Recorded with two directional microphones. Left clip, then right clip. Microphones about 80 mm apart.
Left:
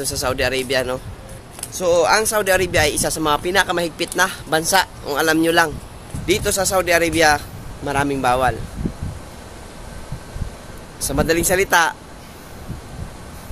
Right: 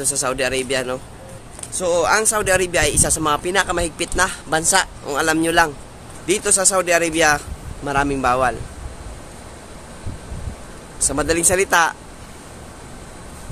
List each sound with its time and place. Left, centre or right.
0.0 s a man's voice: centre
11.0 s speech: centre